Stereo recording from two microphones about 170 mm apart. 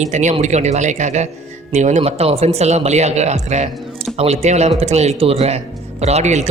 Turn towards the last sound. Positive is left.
turn(degrees=-40)  # may be behind; listen again after turning